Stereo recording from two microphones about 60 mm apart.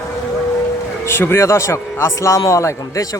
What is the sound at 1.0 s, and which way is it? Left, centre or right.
A man's voice, left.